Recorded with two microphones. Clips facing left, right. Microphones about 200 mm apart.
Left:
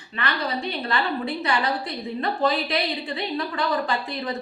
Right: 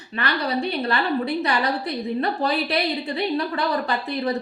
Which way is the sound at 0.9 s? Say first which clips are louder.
Right 1 dB; 35° right (ahead or behind).